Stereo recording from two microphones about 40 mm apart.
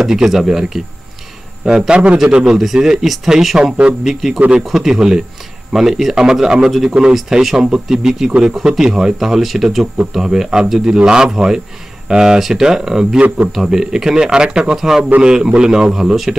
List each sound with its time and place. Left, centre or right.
0.0 s speech: centre
7.2 s speech: centre
10.9 s speech: right
14.8 s speech: centre